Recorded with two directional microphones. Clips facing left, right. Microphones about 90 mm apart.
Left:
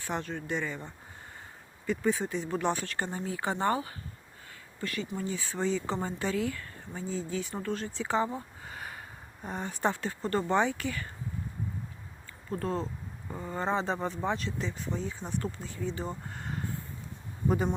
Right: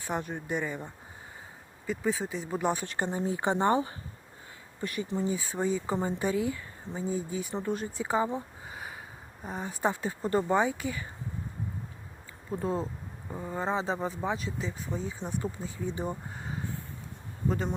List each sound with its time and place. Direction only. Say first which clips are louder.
0.1 s speech: right 1 dB; 15° right (ahead or behind)
8.3 s a sound: right 3 dB; 15° right (ahead or behind)
9.4 s speech: even; 5° right (ahead or behind)
12.5 s speech: right 1 dB; 10° right (ahead or behind)